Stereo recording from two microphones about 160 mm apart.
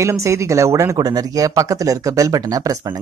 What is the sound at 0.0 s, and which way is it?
Speech, 20° right (ahead or behind).